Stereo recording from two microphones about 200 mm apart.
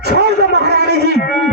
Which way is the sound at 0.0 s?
55° right (ahead or behind).